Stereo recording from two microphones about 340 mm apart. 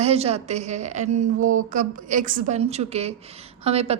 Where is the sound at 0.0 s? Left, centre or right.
Centre.